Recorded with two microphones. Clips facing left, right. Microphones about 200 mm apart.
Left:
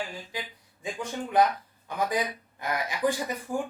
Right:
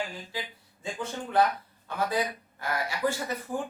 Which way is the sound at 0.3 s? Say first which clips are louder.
Even; 15° left (ahead or behind).